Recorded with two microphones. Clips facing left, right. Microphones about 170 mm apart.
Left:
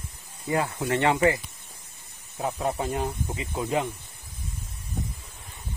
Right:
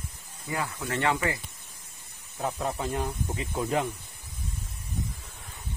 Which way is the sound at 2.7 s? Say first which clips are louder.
Left 3 dB; 20° left (ahead or behind).